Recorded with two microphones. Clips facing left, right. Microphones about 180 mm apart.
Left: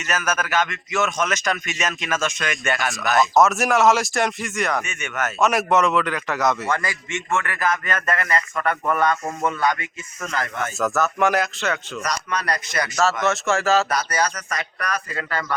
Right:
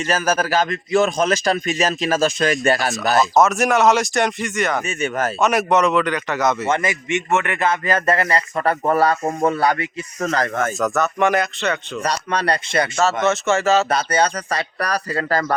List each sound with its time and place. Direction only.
0.1 s a man's voice: 30° right (ahead or behind)
3.3 s speech: centre (ahead or behind)
4.9 s a man's voice: 35° right (ahead or behind)
5.4 s speech: centre (ahead or behind)
6.7 s a man's voice: 20° right (ahead or behind); by 10.7 s 40° right (ahead or behind)
10.8 s speech: centre (ahead or behind)
12.0 s speech: 30° right (ahead or behind)
13.2 s speech: centre (ahead or behind)
13.9 s a man's voice: 30° right (ahead or behind)